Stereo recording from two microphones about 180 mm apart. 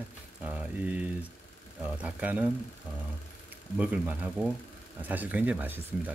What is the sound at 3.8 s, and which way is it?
Speech, 10° right (ahead or behind).